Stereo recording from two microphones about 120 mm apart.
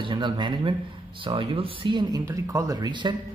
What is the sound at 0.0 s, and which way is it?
A man's voice, 40° right (ahead or behind).